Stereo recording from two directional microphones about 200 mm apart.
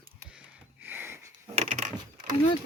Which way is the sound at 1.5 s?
35° right (ahead or behind).